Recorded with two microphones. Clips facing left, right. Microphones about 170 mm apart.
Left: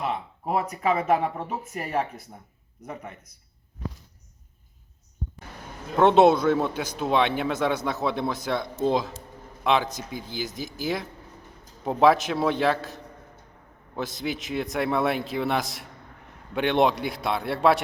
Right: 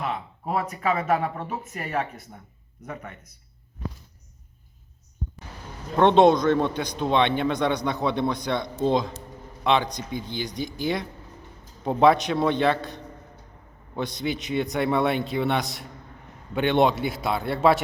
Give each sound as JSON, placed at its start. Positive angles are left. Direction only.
{"t": 0.5, "sound": "speech", "side_deg": 20}
{"t": 1.1, "sound": "speech", "side_deg": 5}
{"t": 6.0, "sound": "speech", "side_deg": 5}